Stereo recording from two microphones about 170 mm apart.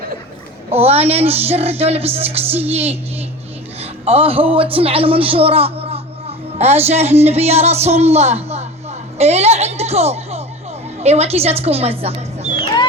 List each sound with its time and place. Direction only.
0.7 s a man's voice: 35° right (ahead or behind)